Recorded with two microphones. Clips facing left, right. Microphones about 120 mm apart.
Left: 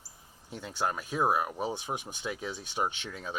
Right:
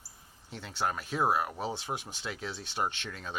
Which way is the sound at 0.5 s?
15° left (ahead or behind).